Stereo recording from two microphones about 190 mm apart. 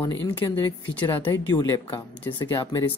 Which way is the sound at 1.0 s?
10° left (ahead or behind).